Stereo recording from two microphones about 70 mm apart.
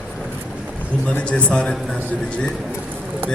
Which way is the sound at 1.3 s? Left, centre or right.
Centre.